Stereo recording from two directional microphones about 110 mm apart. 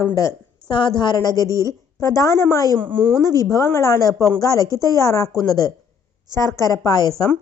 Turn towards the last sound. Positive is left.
turn(degrees=35)  # may be behind; listen again after turning